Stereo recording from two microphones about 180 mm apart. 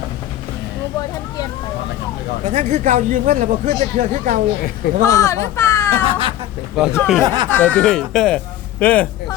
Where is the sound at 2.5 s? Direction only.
40° right (ahead or behind).